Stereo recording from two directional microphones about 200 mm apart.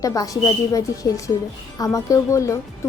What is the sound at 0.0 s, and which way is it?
A woman's voice, 15° left (ahead or behind).